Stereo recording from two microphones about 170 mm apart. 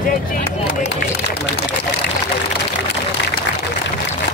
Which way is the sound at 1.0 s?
90° left.